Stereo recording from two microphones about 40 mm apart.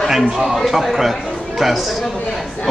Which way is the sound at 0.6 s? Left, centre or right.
Centre.